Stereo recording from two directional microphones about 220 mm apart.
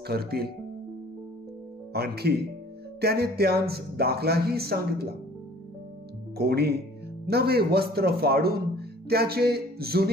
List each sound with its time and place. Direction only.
0.1 s speech: 45° right (ahead or behind)
2.0 s speech: 45° right (ahead or behind)
6.3 s speech: 45° right (ahead or behind)